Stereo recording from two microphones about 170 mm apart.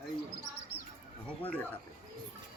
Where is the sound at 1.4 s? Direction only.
10° left (ahead or behind).